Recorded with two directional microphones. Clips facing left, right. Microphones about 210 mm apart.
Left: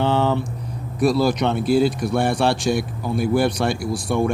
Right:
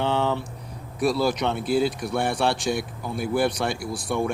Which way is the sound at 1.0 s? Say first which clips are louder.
Left 4 dB; 5° right (ahead or behind).